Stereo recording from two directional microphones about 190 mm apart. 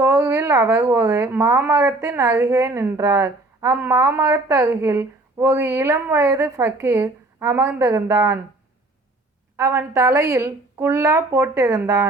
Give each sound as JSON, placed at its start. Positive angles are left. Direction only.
{"t": 0.0, "sound": "speech", "side_deg": -15}
{"t": 9.6, "sound": "speech", "side_deg": -15}